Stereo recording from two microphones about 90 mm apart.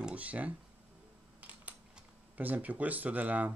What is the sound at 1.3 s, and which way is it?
Camera, 15° right (ahead or behind).